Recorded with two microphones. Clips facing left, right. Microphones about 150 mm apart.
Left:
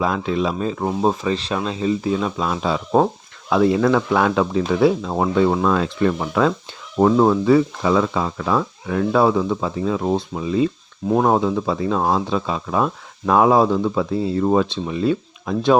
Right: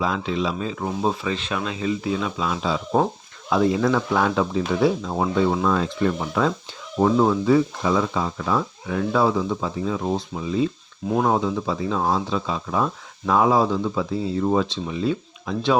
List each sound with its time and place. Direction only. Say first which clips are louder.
0.0 s speech: left 3 dB; 50° left (ahead or behind); by 6.5 s 65° left (ahead or behind)
7.0 s speech: left 4 dB; 55° left (ahead or behind)
11.1 s speech: left 4 dB; 50° left (ahead or behind)